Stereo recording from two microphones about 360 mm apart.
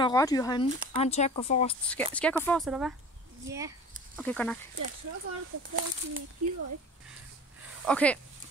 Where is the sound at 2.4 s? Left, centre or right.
Centre.